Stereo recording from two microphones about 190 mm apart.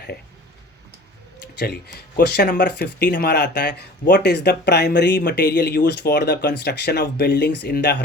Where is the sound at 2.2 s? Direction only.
60° left (ahead or behind).